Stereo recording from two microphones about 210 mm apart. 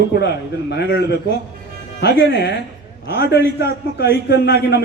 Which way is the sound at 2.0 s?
50° left (ahead or behind).